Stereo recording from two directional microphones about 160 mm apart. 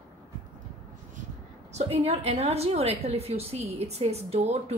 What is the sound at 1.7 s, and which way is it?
A woman's voice, 40° right (ahead or behind).